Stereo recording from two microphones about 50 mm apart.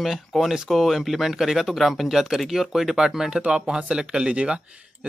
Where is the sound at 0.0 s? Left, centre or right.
Centre.